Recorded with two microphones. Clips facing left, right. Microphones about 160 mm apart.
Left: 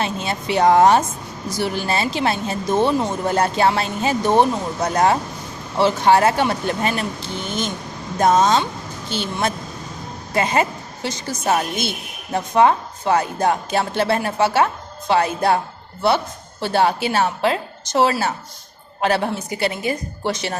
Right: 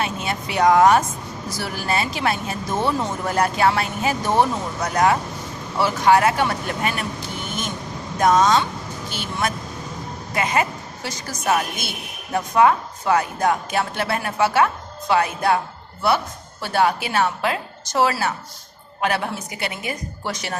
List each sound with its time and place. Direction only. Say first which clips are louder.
0.0 s a woman's voice: left 2 dB; 30° left (ahead or behind)